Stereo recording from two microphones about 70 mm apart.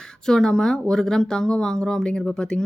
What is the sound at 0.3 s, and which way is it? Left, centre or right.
Speech, centre.